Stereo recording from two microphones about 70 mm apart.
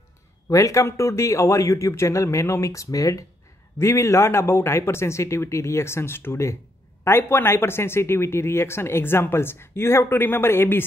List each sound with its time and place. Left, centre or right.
0.5 s a man's voice: left
2.6 s a man's voice: left
3.8 s speech: left